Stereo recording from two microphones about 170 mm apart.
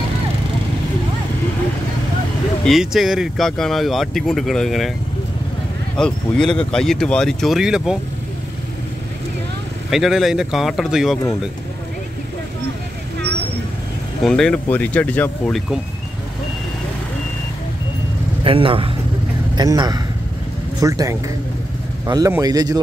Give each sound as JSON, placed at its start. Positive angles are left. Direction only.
{"t": 2.6, "sound": "speech", "side_deg": 0}
{"t": 5.9, "sound": "speech", "side_deg": 5}
{"t": 9.8, "sound": "speech", "side_deg": 0}
{"t": 14.2, "sound": "speech", "side_deg": 5}
{"t": 18.4, "sound": "a man's voice", "side_deg": -30}